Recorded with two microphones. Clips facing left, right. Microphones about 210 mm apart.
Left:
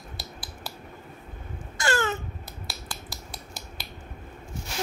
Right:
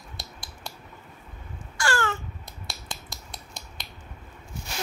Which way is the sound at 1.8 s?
20° left (ahead or behind).